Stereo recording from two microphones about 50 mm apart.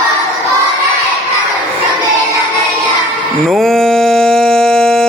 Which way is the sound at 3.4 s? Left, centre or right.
Centre.